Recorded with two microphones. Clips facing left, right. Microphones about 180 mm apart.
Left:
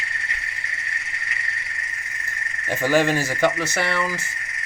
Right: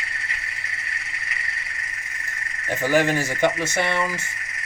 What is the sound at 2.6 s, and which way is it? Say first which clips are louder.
Speech: left 1 dB; 15° right (ahead or behind).